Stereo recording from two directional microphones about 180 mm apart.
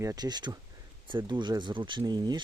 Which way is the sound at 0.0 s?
20° right (ahead or behind).